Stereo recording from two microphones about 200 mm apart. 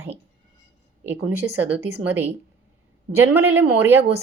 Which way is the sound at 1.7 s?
10° right (ahead or behind).